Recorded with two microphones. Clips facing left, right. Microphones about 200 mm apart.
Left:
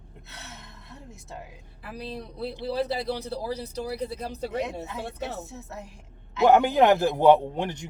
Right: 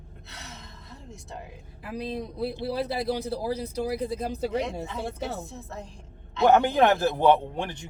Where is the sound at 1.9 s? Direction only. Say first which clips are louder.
Right 4 dB; 10° right (ahead or behind).